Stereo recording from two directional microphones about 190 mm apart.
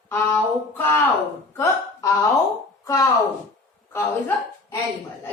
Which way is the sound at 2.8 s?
15° left (ahead or behind).